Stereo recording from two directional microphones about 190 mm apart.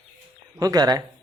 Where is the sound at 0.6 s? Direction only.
20° right (ahead or behind).